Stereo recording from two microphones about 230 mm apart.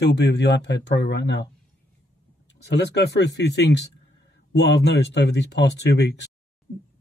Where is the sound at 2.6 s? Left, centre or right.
Left.